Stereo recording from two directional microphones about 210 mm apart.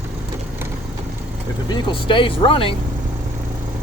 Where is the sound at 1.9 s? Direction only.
25° left (ahead or behind).